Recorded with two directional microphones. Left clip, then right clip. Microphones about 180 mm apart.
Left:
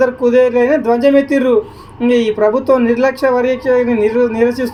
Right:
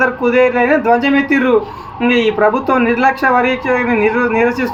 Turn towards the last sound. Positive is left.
turn(degrees=25)  # may be behind; listen again after turning